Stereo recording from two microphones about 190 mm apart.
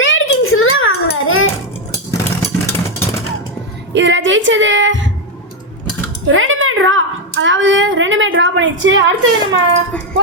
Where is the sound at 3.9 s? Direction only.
70° right (ahead or behind).